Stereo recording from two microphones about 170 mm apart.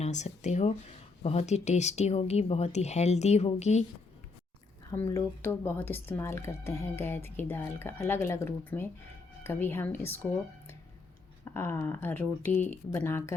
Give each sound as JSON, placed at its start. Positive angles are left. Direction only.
{"t": 0.0, "sound": "speech", "side_deg": 45}
{"t": 4.9, "sound": "speech", "side_deg": 20}
{"t": 11.4, "sound": "speech", "side_deg": 15}